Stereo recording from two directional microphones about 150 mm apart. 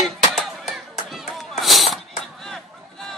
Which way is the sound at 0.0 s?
Centre (ahead or behind).